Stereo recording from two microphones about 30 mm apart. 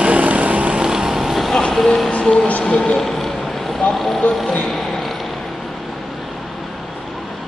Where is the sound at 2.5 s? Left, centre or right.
Left.